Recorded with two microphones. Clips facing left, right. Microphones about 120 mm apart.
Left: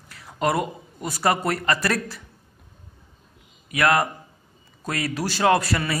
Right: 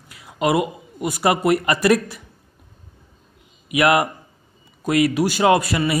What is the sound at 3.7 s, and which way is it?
A man's voice, 15° right (ahead or behind).